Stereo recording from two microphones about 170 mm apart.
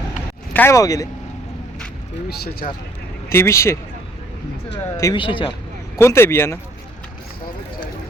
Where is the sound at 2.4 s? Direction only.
60° left (ahead or behind).